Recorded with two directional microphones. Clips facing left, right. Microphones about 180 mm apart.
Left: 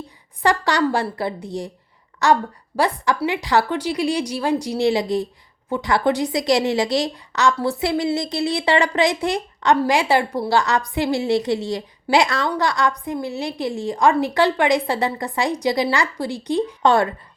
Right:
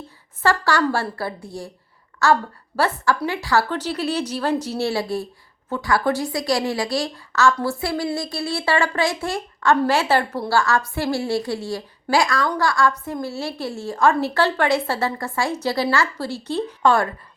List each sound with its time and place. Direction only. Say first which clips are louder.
0.4 s a woman's voice: left 1 dB; 15° left (ahead or behind)